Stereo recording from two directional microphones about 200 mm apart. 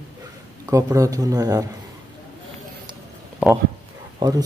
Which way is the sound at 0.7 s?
15° right (ahead or behind).